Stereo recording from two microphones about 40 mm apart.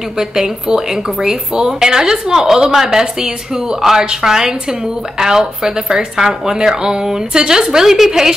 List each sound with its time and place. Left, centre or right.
0.2 s a woman's voice: centre